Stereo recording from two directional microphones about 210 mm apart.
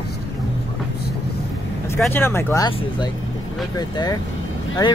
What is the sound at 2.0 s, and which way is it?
Speech, 10° left (ahead or behind).